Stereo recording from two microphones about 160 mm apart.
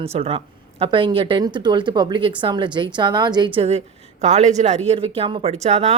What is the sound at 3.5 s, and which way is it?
Speech, 40° right (ahead or behind).